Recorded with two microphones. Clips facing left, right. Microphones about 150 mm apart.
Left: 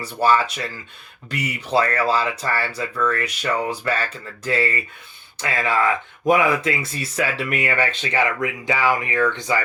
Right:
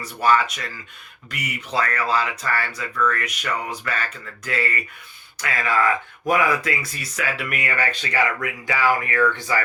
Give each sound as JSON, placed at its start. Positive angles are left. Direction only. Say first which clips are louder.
{"t": 0.0, "sound": "speech", "louder": "left 1 dB", "side_deg": 30}